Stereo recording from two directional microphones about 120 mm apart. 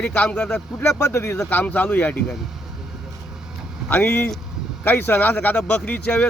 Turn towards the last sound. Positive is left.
turn(degrees=10)  # may be behind; listen again after turning